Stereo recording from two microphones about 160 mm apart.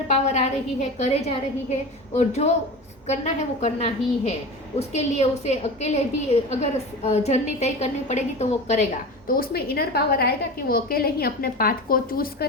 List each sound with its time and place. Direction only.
0.1 s a woman's voice: 45° left (ahead or behind)
9.2 s a woman's voice: 65° left (ahead or behind)